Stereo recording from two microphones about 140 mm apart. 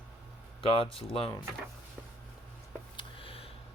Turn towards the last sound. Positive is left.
turn(degrees=40)  # may be behind; listen again after turning